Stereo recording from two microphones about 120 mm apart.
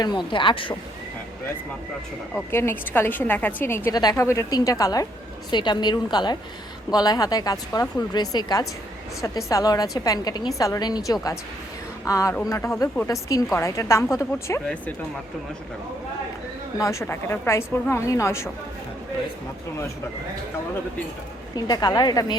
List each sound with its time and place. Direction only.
0.0 s a woman's voice: 40° left (ahead or behind)
2.5 s a woman's voice: 20° left (ahead or behind)
16.7 s a woman's voice: 25° left (ahead or behind)
21.5 s a woman's voice: 35° left (ahead or behind)